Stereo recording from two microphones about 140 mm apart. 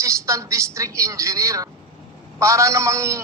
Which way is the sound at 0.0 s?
20° right (ahead or behind).